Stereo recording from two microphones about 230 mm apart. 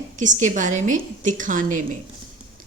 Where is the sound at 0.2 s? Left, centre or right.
Right.